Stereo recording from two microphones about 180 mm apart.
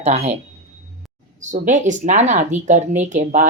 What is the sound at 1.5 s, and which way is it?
Speech, 45° right (ahead or behind).